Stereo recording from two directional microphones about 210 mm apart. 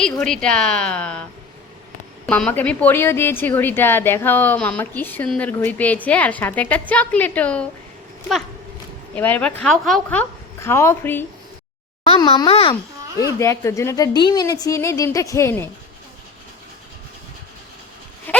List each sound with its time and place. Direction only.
0.0 s a woman's voice: 5° left (ahead or behind)
2.2 s a woman's voice: 5° left (ahead or behind)
9.1 s a woman's voice: 10° left (ahead or behind)
12.0 s a child's voice: 20° left (ahead or behind)
13.1 s a woman's voice: 15° left (ahead or behind)
18.3 s a sound: 10° left (ahead or behind)